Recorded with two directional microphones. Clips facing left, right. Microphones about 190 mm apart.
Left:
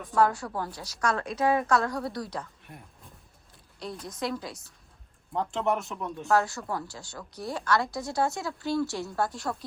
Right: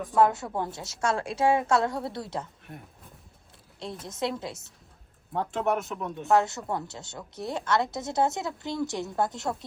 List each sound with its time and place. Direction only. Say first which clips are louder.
0.1 s a woman's voice: right 1 dB; 20° right (ahead or behind)
2.7 s speech: right 4 dB; centre (ahead or behind)
4.0 s a woman's voice: right 2 dB; 25° right (ahead or behind)
5.3 s speech: right 1 dB; 5° right (ahead or behind)
6.2 s a woman's voice: right 2 dB; 20° right (ahead or behind)